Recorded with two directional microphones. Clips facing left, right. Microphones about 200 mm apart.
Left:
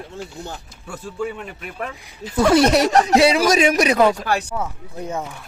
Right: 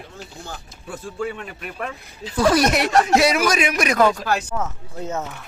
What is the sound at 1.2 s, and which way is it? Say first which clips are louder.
Speech: left 1 dB; centre (ahead or behind).